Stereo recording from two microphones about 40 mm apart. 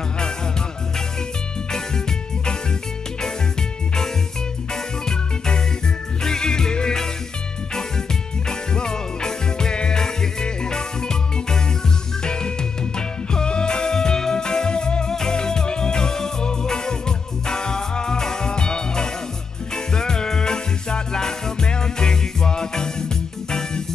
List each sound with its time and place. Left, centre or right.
6.2 s music: centre
8.5 s music: centre